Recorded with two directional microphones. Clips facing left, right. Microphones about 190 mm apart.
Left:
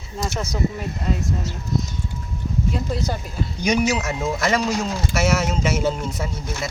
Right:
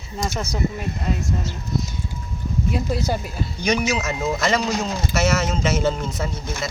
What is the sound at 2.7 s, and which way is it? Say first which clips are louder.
Speech: right 2 dB; 10° right (ahead or behind).